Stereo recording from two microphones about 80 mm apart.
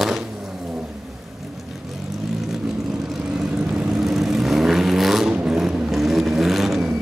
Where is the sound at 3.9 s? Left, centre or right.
Centre.